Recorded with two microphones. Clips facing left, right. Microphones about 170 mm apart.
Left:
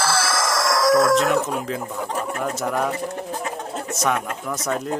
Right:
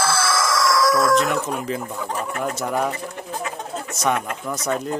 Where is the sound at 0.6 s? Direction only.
50° left (ahead or behind).